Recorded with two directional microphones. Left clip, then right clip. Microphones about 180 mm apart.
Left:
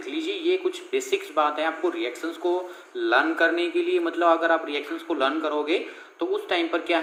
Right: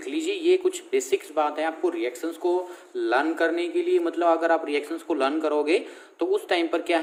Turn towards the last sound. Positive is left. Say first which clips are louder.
# even
turn(degrees=-30)  # may be behind; listen again after turning